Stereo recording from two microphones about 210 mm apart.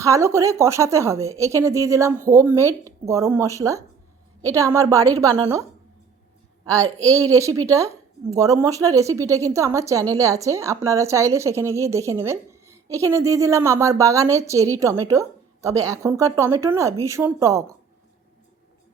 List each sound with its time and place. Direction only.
0.0 s a woman's voice: 15° right (ahead or behind)
7.1 s a woman's voice: 15° right (ahead or behind)